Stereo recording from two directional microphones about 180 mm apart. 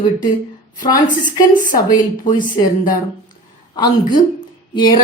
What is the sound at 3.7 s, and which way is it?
Speech, 20° left (ahead or behind).